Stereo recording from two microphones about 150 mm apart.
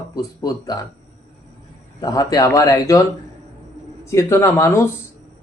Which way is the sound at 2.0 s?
25° left (ahead or behind).